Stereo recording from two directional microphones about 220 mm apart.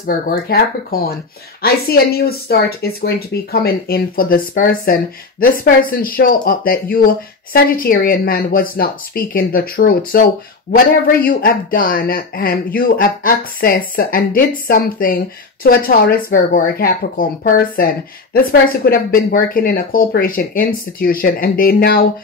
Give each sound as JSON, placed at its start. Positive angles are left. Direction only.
{"t": 0.0, "sound": "a man's voice", "side_deg": 45}